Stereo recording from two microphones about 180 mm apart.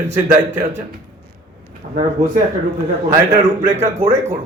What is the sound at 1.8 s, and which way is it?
Speech, 45° right (ahead or behind).